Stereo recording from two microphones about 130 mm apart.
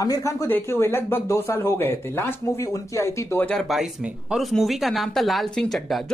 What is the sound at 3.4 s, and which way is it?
A woman's voice, centre (ahead or behind).